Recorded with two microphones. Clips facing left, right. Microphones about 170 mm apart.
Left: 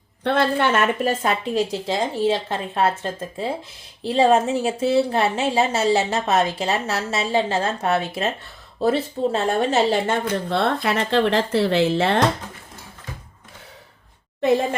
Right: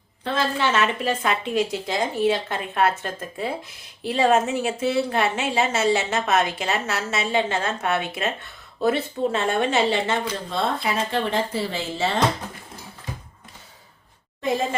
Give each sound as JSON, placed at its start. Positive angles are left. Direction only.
{"t": 0.3, "sound": "speech", "side_deg": 60}
{"t": 14.4, "sound": "speech", "side_deg": 65}